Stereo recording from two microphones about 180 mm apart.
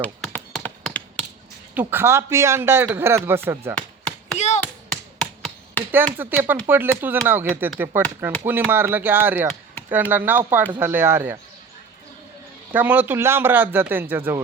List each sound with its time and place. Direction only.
0.0 s tap: 5° left (ahead or behind)
1.7 s a man's voice: 10° right (ahead or behind)
3.8 s chop: 5° left (ahead or behind)
4.4 s tap: 40° left (ahead or behind)
5.2 s tap: 5° left (ahead or behind)
6.1 s a man's voice: 10° right (ahead or behind)
12.7 s a man's voice: 10° right (ahead or behind)